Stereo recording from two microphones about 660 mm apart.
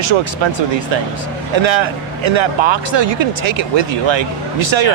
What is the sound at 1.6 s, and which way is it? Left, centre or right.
Speech, right.